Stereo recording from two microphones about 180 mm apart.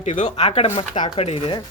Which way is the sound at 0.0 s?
40° left (ahead or behind).